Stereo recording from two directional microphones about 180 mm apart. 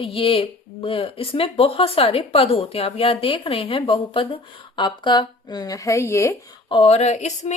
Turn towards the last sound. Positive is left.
turn(degrees=40)  # may be behind; listen again after turning